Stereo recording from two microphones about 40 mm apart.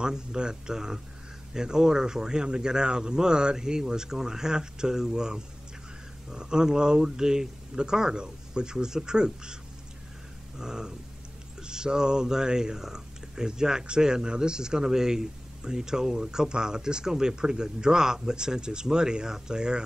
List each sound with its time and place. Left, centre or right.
0.0 s a man's voice: centre
10.6 s a man's voice: centre